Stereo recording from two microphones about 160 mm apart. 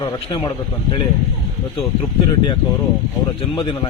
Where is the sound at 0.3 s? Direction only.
25° left (ahead or behind).